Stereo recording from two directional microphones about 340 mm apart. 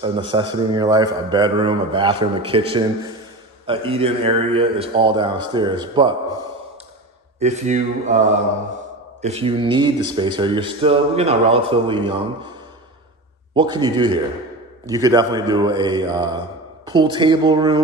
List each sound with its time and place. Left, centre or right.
0.0 s a man's voice: centre
7.3 s mantra: centre
9.2 s a man's voice: centre
13.6 s a man's voice: centre